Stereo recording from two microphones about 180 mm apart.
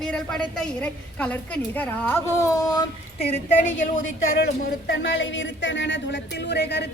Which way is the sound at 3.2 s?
35° left (ahead or behind).